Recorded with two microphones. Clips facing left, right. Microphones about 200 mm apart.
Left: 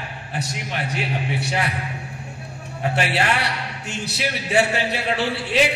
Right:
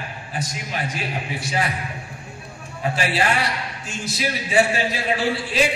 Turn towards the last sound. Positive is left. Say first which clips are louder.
# even
turn(degrees=65)  # may be behind; listen again after turning